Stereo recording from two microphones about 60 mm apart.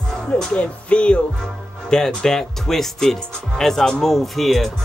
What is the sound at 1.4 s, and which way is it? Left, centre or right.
A man's voice, centre.